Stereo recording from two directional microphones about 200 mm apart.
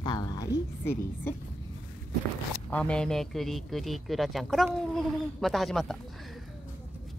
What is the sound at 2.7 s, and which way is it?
A man's voice, 5° left (ahead or behind).